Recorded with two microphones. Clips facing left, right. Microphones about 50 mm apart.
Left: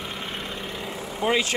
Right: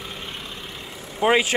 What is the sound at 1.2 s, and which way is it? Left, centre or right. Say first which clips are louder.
Speech: right 5 dB; right.